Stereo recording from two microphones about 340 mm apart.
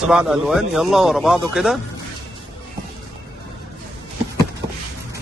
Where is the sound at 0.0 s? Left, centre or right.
Centre.